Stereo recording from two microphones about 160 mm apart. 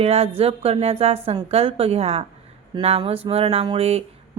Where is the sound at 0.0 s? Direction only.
40° right (ahead or behind).